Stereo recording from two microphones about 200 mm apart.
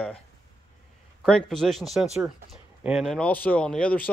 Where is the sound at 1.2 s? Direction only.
Centre (ahead or behind).